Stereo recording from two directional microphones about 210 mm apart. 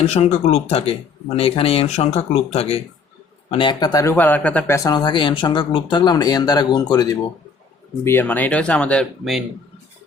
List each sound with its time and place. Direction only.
0.1 s speech: 30° left (ahead or behind); by 9.4 s centre (ahead or behind)